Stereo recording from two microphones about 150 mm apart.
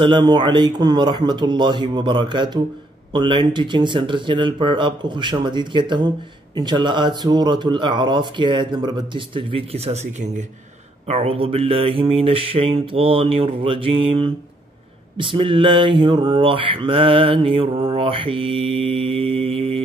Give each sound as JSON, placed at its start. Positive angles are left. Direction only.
{"t": 0.0, "sound": "speech", "side_deg": -30}
{"t": 11.1, "sound": "speech", "side_deg": -40}